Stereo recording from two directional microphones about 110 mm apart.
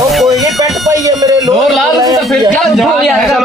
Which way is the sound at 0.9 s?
35° right (ahead or behind).